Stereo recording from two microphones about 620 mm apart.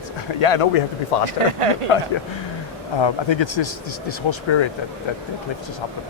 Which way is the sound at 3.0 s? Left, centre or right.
Left.